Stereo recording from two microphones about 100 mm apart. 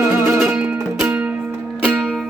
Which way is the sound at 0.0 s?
25° right (ahead or behind).